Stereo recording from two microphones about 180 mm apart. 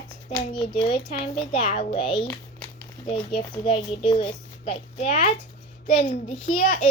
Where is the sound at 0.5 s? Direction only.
25° left (ahead or behind); by 6.8 s 50° left (ahead or behind).